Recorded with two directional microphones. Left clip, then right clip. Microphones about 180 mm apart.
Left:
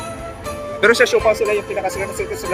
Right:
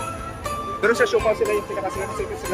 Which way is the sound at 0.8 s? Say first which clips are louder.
Left 6 dB; 35° left (ahead or behind).